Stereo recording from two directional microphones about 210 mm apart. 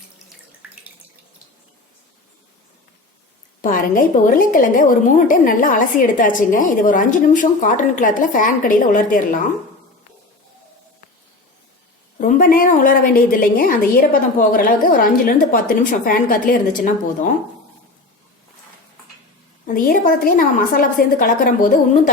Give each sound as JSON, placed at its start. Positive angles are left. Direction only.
{"t": 0.6, "sound": "water", "side_deg": -5}
{"t": 3.6, "sound": "a woman's voice", "side_deg": 40}
{"t": 12.2, "sound": "a woman's voice", "side_deg": 40}
{"t": 19.6, "sound": "a woman's voice", "side_deg": 40}